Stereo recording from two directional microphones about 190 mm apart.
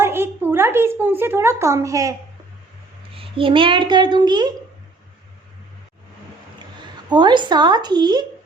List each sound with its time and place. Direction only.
0.0 s speech: 10° right (ahead or behind)
3.2 s a child's voice: 25° right (ahead or behind)
7.1 s a child's voice: 25° right (ahead or behind)